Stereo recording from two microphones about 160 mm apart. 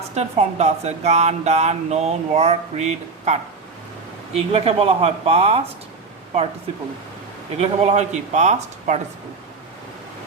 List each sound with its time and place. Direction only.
0.1 s speech: 45° right (ahead or behind)
4.4 s speech: 40° right (ahead or behind)
7.5 s speech: 40° right (ahead or behind)